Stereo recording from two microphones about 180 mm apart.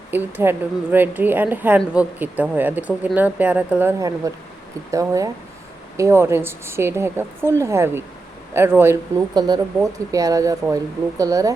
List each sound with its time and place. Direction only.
0.1 s a woman's voice: 10° right (ahead or behind)